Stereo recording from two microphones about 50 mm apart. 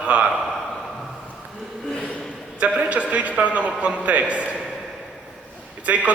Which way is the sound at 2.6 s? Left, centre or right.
Right.